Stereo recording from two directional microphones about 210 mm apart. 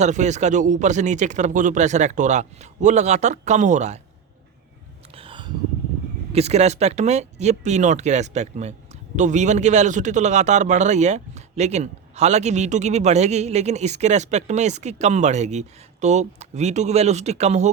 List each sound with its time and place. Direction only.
0.0 s speech: 35° right (ahead or behind)
5.1 s a sound: 25° right (ahead or behind)
6.3 s speech: 30° right (ahead or behind)